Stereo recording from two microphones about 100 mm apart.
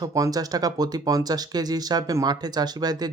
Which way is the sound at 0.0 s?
35° right (ahead or behind).